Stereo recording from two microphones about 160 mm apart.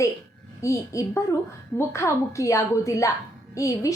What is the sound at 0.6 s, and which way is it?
A woman's voice, 20° left (ahead or behind).